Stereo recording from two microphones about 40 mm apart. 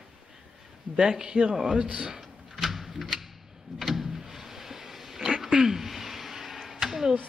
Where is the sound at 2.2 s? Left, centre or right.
Centre.